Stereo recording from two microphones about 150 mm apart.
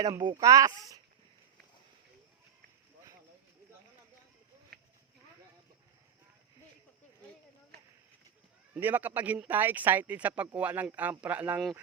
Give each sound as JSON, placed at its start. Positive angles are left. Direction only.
{"t": 0.0, "sound": "speech", "side_deg": -25}
{"t": 8.7, "sound": "speech", "side_deg": -10}